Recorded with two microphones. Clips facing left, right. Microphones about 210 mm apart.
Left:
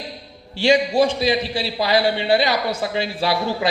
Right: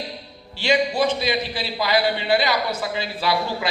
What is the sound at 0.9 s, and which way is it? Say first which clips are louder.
A man's voice: left 4 dB; 30° left (ahead or behind).